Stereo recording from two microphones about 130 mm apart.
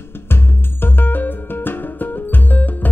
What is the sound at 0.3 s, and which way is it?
Music, 15° left (ahead or behind).